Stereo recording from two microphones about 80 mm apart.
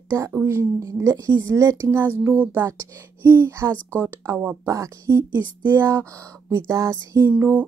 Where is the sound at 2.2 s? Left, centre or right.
Right.